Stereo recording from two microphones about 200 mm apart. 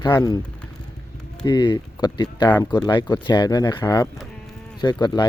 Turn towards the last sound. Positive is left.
turn(degrees=20)  # may be behind; listen again after turning